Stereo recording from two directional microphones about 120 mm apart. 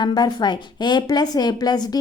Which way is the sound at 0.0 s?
35° left (ahead or behind).